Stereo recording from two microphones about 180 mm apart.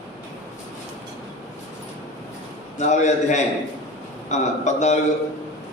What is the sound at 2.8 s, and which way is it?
A man's voice, 40° left (ahead or behind).